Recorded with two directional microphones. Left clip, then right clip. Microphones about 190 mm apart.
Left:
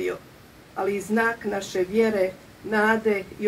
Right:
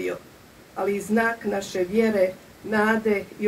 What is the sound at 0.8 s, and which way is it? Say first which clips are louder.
A woman's voice: even; 30° right (ahead or behind).